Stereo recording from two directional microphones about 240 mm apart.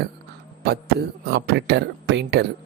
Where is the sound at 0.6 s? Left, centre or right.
Right.